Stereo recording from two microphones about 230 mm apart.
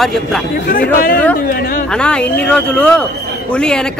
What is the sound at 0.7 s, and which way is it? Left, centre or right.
Speech, left.